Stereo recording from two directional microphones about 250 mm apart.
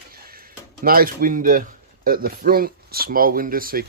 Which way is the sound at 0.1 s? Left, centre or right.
Right.